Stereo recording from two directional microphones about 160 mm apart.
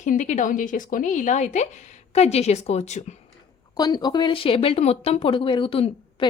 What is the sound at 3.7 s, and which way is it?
Speech, 25° left (ahead or behind).